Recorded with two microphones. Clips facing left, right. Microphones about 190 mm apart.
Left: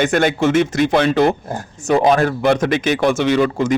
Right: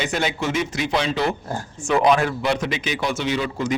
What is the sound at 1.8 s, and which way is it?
Speech, 40° left (ahead or behind).